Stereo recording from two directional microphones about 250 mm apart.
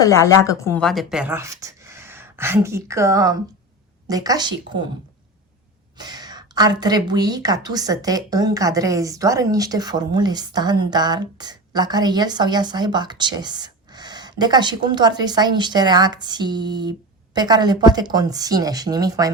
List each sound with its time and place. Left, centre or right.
0.0 s a woman's voice: centre
6.0 s a woman's voice: centre